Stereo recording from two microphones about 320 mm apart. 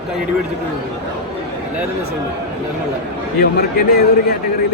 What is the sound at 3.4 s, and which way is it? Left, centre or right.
Speech, left.